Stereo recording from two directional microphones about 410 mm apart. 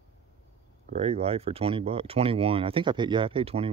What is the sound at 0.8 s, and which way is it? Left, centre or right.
Speech, centre.